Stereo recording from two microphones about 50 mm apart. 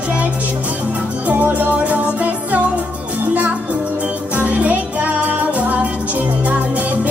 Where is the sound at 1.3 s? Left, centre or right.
Right.